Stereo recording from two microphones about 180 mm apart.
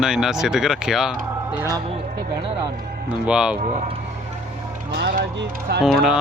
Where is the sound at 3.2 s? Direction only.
5° right (ahead or behind).